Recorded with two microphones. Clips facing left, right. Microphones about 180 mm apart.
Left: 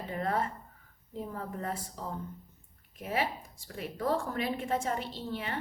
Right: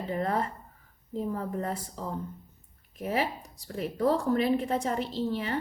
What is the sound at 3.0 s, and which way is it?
A woman's voice, 40° right (ahead or behind).